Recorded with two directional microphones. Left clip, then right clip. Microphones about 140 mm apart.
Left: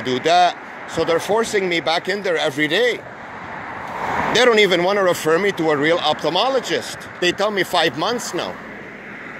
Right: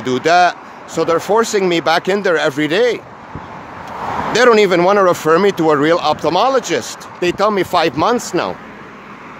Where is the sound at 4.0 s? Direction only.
15° left (ahead or behind).